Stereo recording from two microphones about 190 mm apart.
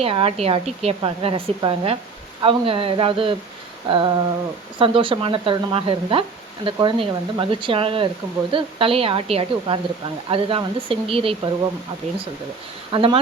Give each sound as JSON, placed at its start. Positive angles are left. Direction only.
{"t": 0.0, "sound": "a woman's voice", "side_deg": -30}
{"t": 12.9, "sound": "a woman's voice", "side_deg": -25}